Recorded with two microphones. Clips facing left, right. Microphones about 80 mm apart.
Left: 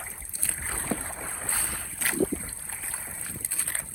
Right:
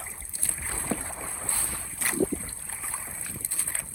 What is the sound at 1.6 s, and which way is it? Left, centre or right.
Boat, left.